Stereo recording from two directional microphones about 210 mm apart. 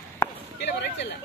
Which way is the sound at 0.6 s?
55° left (ahead or behind).